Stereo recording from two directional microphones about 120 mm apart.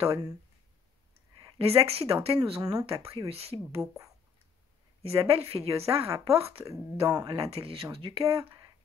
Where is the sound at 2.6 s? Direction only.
30° right (ahead or behind).